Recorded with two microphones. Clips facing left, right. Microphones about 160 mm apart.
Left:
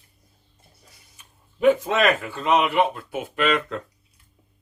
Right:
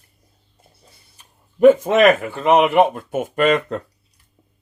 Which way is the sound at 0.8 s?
30° right (ahead or behind).